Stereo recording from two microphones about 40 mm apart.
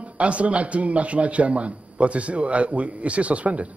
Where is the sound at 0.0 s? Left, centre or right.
Right.